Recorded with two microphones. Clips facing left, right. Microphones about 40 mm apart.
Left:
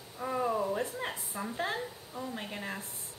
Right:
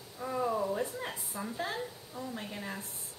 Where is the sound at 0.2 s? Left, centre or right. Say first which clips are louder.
Left 1 dB; centre.